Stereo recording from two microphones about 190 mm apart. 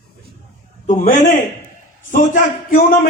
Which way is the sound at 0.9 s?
40° left (ahead or behind).